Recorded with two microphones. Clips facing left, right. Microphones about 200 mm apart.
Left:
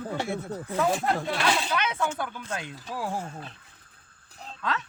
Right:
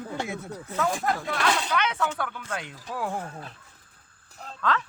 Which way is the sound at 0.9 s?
30° left (ahead or behind).